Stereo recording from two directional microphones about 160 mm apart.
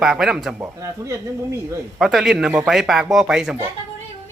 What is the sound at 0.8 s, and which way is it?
Speech, 20° right (ahead or behind).